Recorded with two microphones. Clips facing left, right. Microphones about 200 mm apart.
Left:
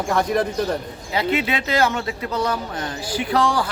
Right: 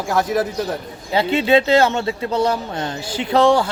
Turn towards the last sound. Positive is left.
turn(degrees=-25)  # may be behind; listen again after turning